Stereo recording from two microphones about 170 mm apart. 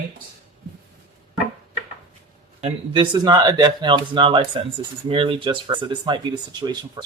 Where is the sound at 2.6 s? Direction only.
30° right (ahead or behind).